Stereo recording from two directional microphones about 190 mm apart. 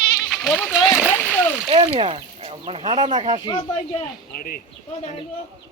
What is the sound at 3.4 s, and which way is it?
Speech, 25° left (ahead or behind).